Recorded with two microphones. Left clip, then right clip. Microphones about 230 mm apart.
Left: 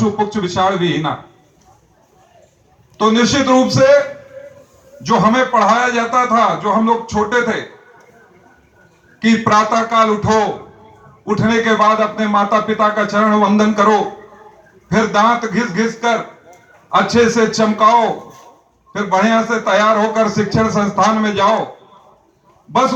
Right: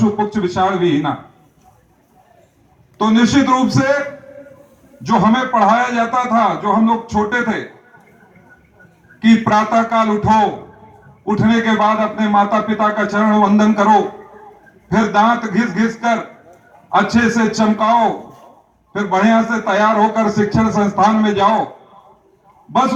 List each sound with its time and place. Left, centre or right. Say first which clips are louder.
0.0 s a man's voice: even; left
3.0 s a man's voice: left 1 dB; left
5.0 s a man's voice: left 2 dB; left
9.2 s a man's voice: left 1 dB; left
11.4 s a man's voice: left 2 dB; left